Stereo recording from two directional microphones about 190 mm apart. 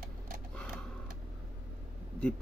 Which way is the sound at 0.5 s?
5° left (ahead or behind).